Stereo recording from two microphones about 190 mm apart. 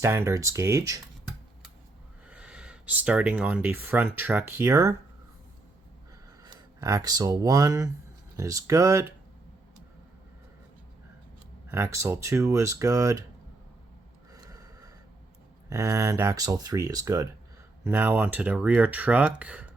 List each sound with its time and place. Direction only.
0.0 s speech: 15° right (ahead or behind)
2.2 s speech: 5° right (ahead or behind)
6.4 s speech: 20° right (ahead or behind)
11.7 s speech: 15° right (ahead or behind)
14.3 s snort: 20° right (ahead or behind)
15.7 s speech: 15° right (ahead or behind)